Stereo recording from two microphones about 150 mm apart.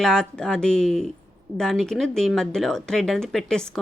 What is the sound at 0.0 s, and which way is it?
Speech, 5° left (ahead or behind).